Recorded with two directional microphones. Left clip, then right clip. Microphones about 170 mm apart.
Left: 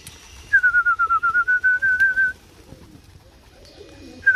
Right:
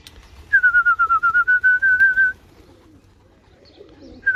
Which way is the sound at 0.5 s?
20° right (ahead or behind).